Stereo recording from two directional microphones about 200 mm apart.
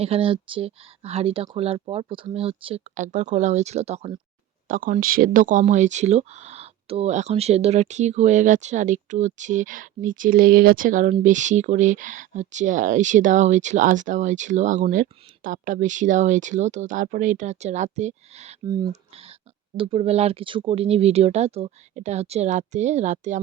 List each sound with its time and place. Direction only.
0.0 s speech: 30° right (ahead or behind)
4.7 s speech: 45° right (ahead or behind)
18.6 s speech: 20° right (ahead or behind); by 23.4 s 35° right (ahead or behind)